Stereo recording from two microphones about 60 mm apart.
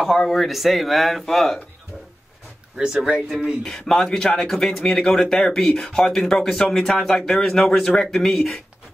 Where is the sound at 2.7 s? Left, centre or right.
Centre.